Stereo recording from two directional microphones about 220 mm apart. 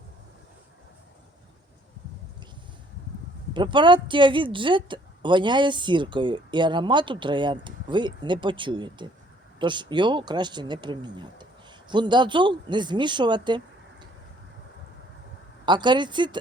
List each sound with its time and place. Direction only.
3.5 s speech: 20° right (ahead or behind)
15.6 s speech: 20° right (ahead or behind)